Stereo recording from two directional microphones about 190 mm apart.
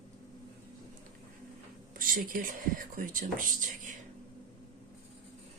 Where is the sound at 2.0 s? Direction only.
50° right (ahead or behind).